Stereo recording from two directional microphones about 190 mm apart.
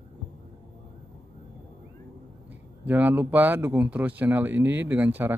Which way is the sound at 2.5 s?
10° right (ahead or behind).